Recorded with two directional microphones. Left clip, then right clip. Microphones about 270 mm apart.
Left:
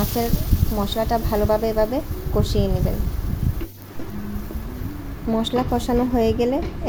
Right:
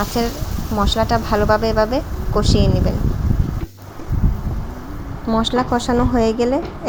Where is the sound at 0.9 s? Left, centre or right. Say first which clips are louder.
Right 4 dB; centre.